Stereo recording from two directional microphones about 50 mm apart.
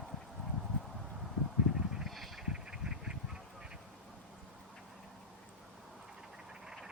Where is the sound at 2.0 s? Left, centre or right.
Centre.